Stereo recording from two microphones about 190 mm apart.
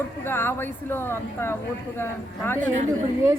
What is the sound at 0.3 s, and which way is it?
A woman's voice, 10° left (ahead or behind).